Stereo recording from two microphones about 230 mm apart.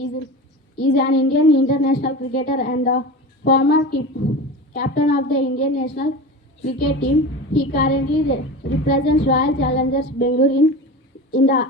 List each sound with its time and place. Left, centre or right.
0.8 s a woman's voice: left